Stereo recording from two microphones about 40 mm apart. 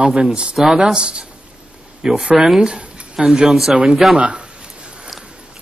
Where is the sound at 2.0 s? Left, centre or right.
Centre.